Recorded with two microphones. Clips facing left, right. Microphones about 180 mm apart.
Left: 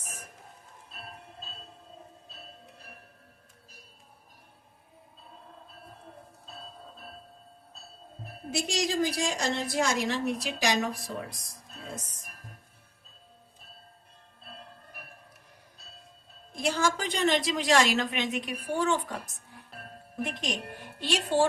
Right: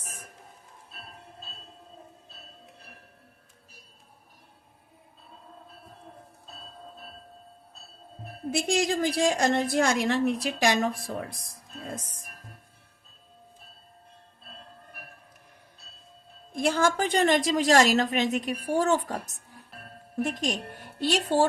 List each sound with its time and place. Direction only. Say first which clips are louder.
8.4 s a woman's voice: right 4 dB; 55° right (ahead or behind)
16.6 s a woman's voice: right 4 dB; 55° right (ahead or behind)
20.2 s speech: right 3 dB; 40° right (ahead or behind)